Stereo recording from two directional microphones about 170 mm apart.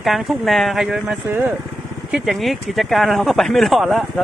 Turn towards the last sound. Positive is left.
turn(degrees=0)  # may be behind; listen again after turning